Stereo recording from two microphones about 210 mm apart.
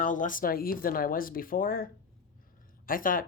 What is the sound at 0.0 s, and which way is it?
Speech, 40° left (ahead or behind).